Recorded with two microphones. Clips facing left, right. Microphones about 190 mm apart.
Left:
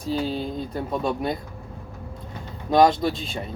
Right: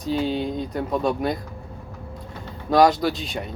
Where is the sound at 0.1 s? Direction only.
Centre (ahead or behind).